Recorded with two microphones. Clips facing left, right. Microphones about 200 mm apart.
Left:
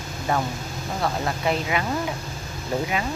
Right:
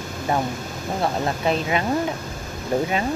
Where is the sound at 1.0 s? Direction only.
25° right (ahead or behind).